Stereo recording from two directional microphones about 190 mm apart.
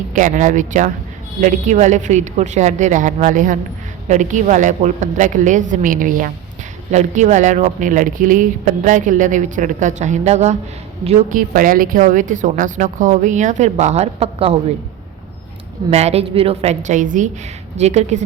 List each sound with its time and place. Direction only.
0.1 s speech: 40° right (ahead or behind)
11.3 s speech: 50° right (ahead or behind); by 14.5 s 30° right (ahead or behind)
15.9 s speech: 35° right (ahead or behind)